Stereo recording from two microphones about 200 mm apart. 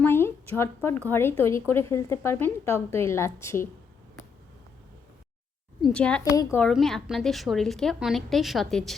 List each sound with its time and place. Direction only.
0.0 s a woman's voice: 10° left (ahead or behind)
5.8 s a woman's voice: 5° left (ahead or behind)
6.2 s a woman's voice: 15° left (ahead or behind)
6.6 s a woman's voice: centre (ahead or behind)